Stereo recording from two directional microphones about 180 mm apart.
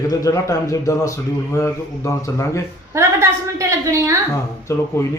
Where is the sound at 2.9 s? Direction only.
15° right (ahead or behind).